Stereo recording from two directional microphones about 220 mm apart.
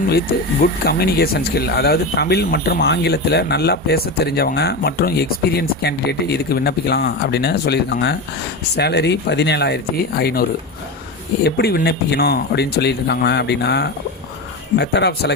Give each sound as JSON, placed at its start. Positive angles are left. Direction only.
{"t": 0.9, "sound": "speech", "side_deg": 45}
{"t": 11.4, "sound": "speech", "side_deg": 45}